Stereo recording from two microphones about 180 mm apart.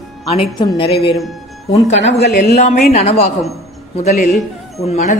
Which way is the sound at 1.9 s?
85° left.